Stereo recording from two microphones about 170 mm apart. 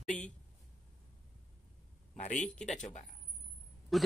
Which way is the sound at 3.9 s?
Centre (ahead or behind).